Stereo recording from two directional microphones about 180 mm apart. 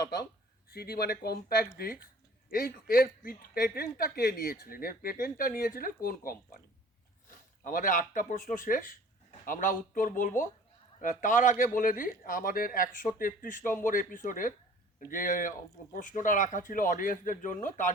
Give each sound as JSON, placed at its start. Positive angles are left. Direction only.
{"t": 0.7, "sound": "a woman's voice", "side_deg": 60}